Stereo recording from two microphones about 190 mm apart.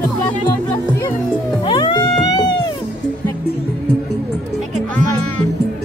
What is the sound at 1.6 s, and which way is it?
Music, 25° left (ahead or behind).